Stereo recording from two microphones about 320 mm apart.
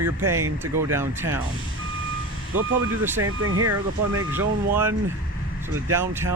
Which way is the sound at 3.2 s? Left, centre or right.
Right.